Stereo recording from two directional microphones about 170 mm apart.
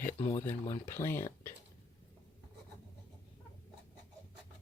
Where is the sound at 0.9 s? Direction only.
15° left (ahead or behind).